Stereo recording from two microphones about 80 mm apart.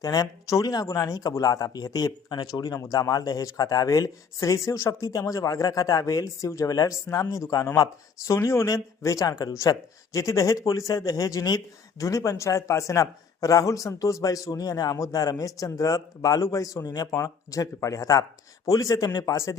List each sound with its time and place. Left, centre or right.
0.0 s speech: left
17.1 s speech: left